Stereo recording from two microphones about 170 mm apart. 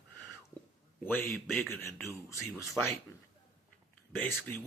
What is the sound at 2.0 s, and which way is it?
Speech, 15° left (ahead or behind).